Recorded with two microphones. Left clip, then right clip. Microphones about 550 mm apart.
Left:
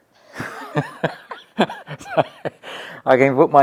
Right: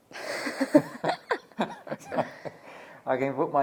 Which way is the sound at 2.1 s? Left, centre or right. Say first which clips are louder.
Left 12 dB; left.